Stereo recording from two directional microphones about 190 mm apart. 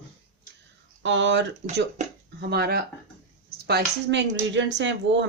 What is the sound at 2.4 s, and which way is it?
Speech, 60° right (ahead or behind).